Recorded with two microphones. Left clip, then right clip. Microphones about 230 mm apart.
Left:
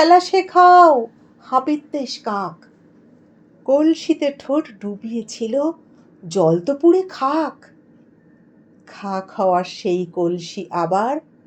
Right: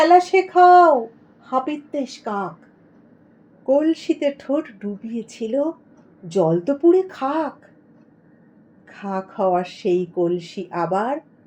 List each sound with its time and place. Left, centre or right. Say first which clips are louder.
0.0 s a woman's voice: left 1 dB; left
3.7 s a woman's voice: left 2 dB; left
9.0 s a woman's voice: left 2 dB; left